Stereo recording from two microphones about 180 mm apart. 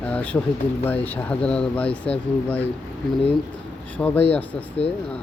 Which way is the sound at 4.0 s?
10° left (ahead or behind).